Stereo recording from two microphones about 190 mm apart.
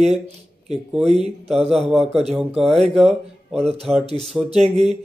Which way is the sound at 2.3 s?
Centre (ahead or behind).